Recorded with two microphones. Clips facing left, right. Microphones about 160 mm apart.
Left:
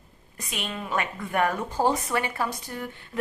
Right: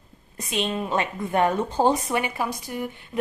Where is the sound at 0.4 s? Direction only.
25° right (ahead or behind).